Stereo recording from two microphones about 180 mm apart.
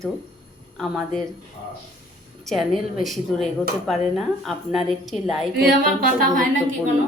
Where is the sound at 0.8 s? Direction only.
Centre (ahead or behind).